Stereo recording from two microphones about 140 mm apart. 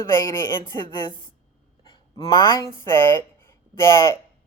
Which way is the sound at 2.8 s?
20° left (ahead or behind).